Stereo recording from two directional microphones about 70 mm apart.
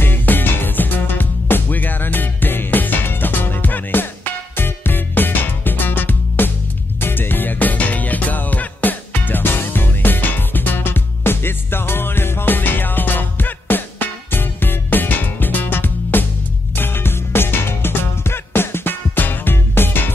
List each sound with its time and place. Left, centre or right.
0.0 s music: left